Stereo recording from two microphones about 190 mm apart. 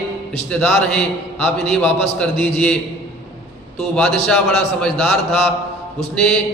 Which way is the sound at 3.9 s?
Centre (ahead or behind).